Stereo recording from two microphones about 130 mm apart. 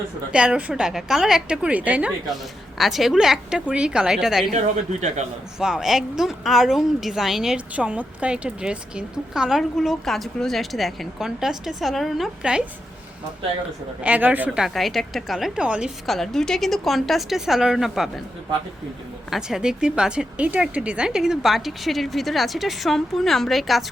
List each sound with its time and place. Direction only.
0.3 s a woman's voice: 5° right (ahead or behind)
4.5 s speech: 60° right (ahead or behind)
5.5 s a woman's voice: 5° right (ahead or behind)
14.0 s a woman's voice: 10° right (ahead or behind)
16.0 s a woman's voice: 5° left (ahead or behind)
19.3 s a woman's voice: 5° right (ahead or behind)